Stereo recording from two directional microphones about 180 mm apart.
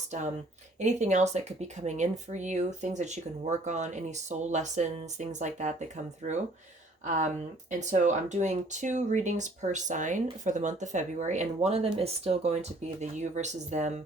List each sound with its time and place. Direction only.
0.8 s speech: 40° right (ahead or behind)